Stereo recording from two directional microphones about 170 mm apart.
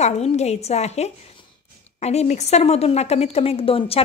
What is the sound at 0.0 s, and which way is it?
A woman's voice, 40° left (ahead or behind).